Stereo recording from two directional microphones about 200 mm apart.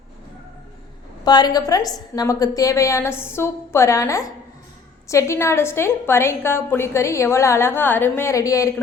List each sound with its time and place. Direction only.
1.2 s a woman's voice: 20° left (ahead or behind)